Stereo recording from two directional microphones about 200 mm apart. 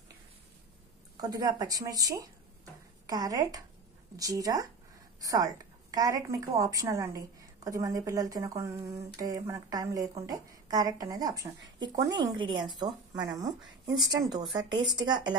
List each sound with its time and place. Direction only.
1.1 s a woman's voice: 20° right (ahead or behind)